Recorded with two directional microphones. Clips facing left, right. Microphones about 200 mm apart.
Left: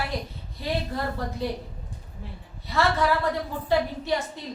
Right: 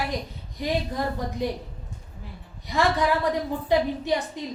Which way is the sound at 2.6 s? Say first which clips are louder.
Right 1 dB; 15° right (ahead or behind).